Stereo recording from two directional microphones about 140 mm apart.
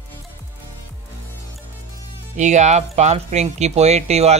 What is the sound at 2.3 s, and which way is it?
Speech, 60° right (ahead or behind).